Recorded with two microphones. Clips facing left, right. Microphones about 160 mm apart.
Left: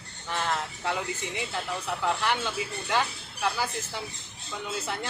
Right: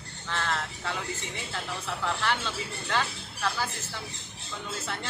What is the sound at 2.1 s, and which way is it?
Speech, 15° left (ahead or behind).